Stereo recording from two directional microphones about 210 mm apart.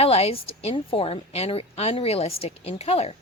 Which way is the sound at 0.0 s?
30° left (ahead or behind).